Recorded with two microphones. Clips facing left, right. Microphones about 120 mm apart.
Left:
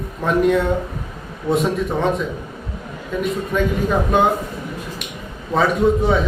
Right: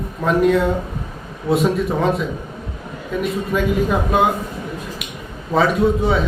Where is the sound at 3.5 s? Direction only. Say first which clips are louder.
Right 1 dB; 5° right (ahead or behind).